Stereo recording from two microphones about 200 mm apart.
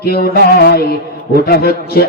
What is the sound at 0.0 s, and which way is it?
Mantra, 50° left (ahead or behind).